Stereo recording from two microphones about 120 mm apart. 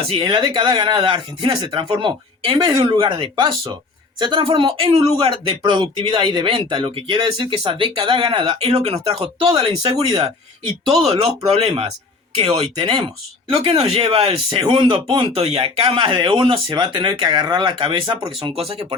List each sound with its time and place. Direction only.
0.1 s speech: 45° right (ahead or behind)
10.0 s speech: 40° right (ahead or behind)
11.0 s speech: 55° right (ahead or behind)